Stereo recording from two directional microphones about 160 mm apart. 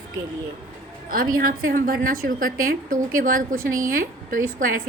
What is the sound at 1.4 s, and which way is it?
A woman's voice, 65° right (ahead or behind).